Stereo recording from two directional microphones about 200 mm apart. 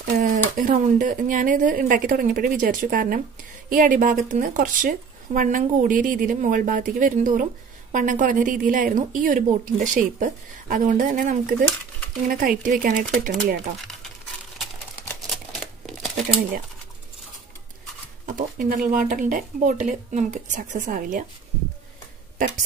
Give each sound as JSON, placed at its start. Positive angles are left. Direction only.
{"t": 0.0, "sound": "a sound", "side_deg": -40}
{"t": 0.6, "sound": "speech", "side_deg": -40}
{"t": 15.9, "sound": "shuffling cards", "side_deg": 0}
{"t": 18.2, "sound": "speech", "side_deg": -40}